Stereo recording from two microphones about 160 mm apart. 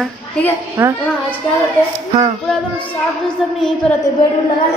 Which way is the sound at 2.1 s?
35° right (ahead or behind).